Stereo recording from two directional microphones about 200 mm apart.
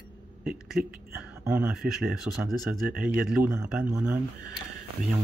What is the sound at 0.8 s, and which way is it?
Speech, 45° right (ahead or behind).